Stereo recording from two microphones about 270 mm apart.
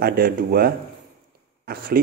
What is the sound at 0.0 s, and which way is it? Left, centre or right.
Speech, right.